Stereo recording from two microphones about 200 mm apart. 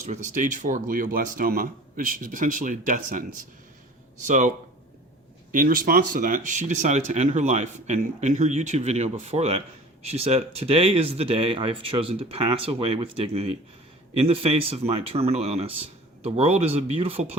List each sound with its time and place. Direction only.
0.3 s speech: 40° right (ahead or behind)